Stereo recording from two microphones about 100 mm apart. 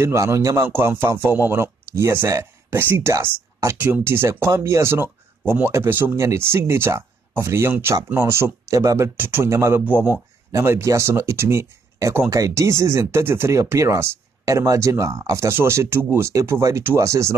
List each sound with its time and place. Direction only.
0.0 s speech: 30° right (ahead or behind)
9.8 s speech: 15° right (ahead or behind)
10.5 s speech: 30° right (ahead or behind)